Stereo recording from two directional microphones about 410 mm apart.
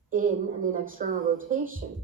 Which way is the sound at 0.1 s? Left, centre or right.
Centre.